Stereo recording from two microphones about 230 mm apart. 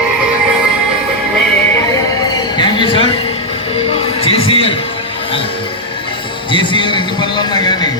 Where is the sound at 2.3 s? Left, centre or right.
Centre.